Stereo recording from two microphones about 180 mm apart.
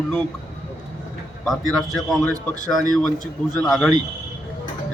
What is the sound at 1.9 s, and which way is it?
A man's voice, centre (ahead or behind).